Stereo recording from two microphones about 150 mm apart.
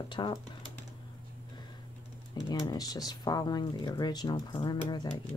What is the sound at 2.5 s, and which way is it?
Speech, 25° left (ahead or behind).